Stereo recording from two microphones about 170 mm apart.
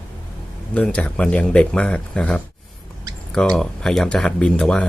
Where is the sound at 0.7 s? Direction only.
10° left (ahead or behind).